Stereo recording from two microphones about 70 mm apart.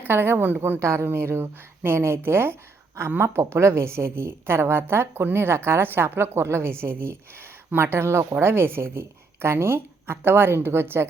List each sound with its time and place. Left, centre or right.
0.0 s a woman's voice: right
0.8 s a woman's voice: right